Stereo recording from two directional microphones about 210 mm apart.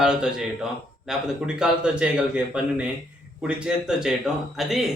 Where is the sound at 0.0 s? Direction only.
5° right (ahead or behind).